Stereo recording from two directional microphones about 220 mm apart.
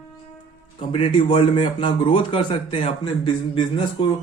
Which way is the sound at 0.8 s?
25° left (ahead or behind).